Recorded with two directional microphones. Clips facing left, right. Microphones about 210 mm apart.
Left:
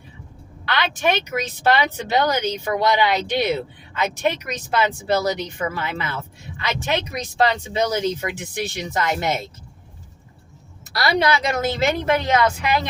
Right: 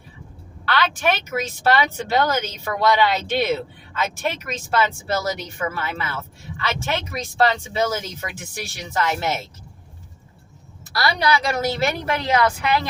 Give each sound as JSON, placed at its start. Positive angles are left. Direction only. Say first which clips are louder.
{"t": 0.6, "sound": "a woman's voice", "louder": "even", "side_deg": 20}
{"t": 10.9, "sound": "a woman's voice", "louder": "left 1 dB", "side_deg": 25}